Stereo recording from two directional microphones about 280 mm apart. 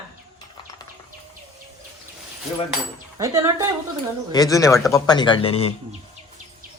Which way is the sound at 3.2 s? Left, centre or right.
Centre.